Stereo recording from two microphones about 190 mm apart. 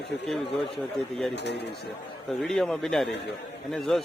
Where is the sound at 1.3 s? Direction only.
65° left (ahead or behind).